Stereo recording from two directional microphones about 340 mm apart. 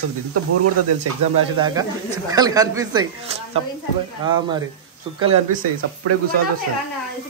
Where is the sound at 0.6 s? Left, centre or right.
Right.